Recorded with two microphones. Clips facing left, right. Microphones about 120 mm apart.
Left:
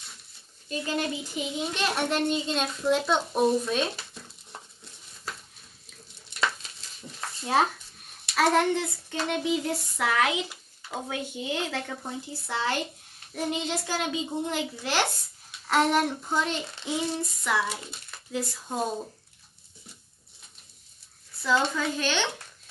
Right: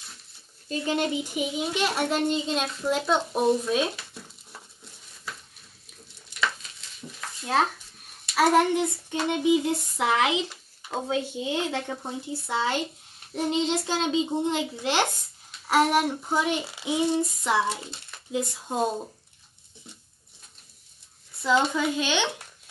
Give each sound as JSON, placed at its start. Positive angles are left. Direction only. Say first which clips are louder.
{"t": 0.7, "sound": "a child's voice", "louder": "right 3 dB", "side_deg": -25}
{"t": 8.4, "sound": "child singing", "louder": "right 2 dB", "side_deg": -10}
{"t": 11.1, "sound": "a child's voice", "louder": "right 5 dB", "side_deg": -25}
{"t": 15.6, "sound": "child singing", "louder": "right 2 dB", "side_deg": -10}
{"t": 18.3, "sound": "a child's voice", "louder": "right 3 dB", "side_deg": -20}
{"t": 21.4, "sound": "child singing", "louder": "right 3 dB", "side_deg": -20}